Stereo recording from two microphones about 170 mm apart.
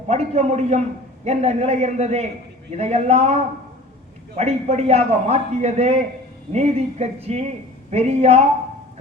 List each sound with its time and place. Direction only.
0.1 s a man's voice: 40° right (ahead or behind)
4.4 s a man's voice: 40° right (ahead or behind)